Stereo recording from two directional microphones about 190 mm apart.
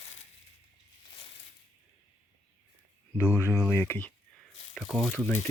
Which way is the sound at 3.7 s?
10° left (ahead or behind).